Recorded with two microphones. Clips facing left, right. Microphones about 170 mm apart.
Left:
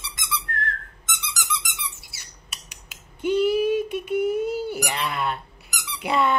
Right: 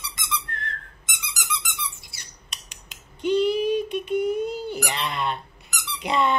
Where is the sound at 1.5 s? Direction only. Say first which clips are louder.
Right 1 dB; 5° left (ahead or behind).